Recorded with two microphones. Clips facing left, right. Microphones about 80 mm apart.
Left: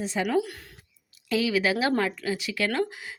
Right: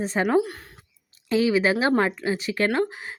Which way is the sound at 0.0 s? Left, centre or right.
Right.